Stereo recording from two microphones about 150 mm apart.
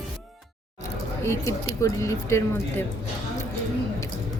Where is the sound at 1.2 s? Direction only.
20° left (ahead or behind).